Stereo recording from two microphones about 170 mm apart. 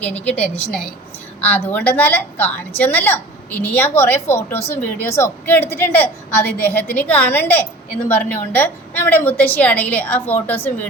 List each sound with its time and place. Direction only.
0.0 s a woman's voice: 10° left (ahead or behind)